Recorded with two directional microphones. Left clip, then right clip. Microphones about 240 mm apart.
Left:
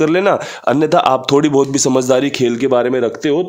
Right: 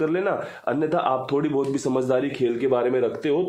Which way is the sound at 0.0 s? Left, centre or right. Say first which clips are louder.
Left 10 dB; left.